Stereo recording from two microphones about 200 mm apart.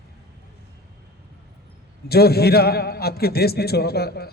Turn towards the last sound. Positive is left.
turn(degrees=50)  # may be behind; listen again after turning